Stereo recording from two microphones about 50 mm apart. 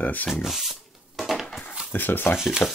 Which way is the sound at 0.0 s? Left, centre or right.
Left.